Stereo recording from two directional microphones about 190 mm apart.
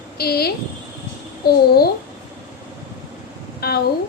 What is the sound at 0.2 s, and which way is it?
Speech, 55° left (ahead or behind).